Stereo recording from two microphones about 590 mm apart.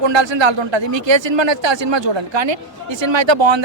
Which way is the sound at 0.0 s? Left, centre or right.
Right.